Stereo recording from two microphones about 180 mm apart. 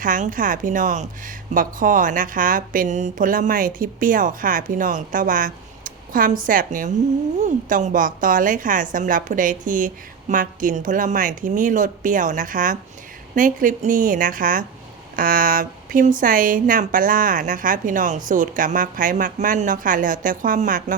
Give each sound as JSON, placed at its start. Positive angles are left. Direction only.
{"t": 0.0, "sound": "speech", "side_deg": -50}